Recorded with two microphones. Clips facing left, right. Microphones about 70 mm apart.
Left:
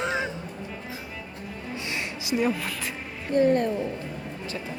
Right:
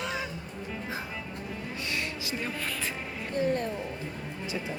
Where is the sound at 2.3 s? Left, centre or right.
Centre.